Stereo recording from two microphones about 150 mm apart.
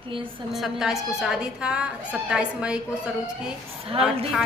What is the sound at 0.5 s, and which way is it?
A woman's voice, centre (ahead or behind).